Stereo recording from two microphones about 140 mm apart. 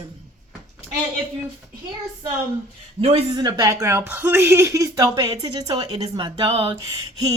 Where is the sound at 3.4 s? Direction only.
25° right (ahead or behind).